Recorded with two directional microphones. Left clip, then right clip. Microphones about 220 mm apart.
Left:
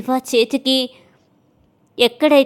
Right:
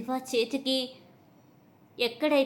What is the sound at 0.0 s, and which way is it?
Speech, 45° left (ahead or behind).